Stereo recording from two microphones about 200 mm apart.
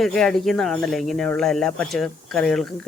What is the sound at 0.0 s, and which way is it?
Speech, centre (ahead or behind).